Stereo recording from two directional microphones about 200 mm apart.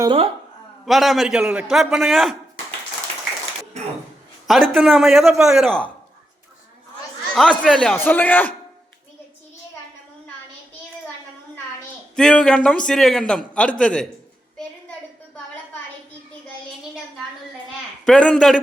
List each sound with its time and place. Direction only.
0.0 s speech: 25° right (ahead or behind)
0.9 s a man's voice: centre (ahead or behind)
4.4 s a man's voice: centre (ahead or behind)
7.3 s a man's voice: 5° left (ahead or behind)
12.1 s a man's voice: 5° left (ahead or behind)
18.0 s a man's voice: 5° left (ahead or behind)